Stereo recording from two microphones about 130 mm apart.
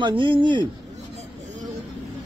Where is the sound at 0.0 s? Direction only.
40° right (ahead or behind).